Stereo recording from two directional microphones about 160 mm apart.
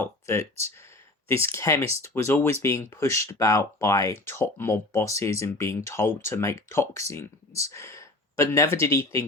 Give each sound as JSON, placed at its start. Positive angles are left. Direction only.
{"t": 0.0, "sound": "speech", "side_deg": 15}
{"t": 1.5, "sound": "speech", "side_deg": 20}